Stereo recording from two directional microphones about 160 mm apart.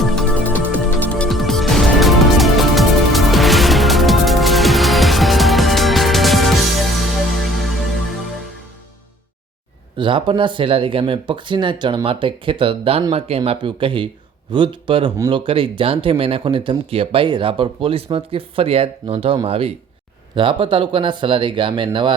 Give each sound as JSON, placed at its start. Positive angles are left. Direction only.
{"t": 0.0, "sound": "music", "side_deg": 5}
{"t": 10.0, "sound": "speech", "side_deg": -30}